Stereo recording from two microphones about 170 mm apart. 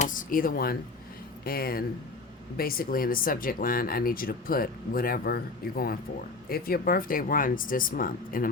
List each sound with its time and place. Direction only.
0.0 s speech: 50° left (ahead or behind)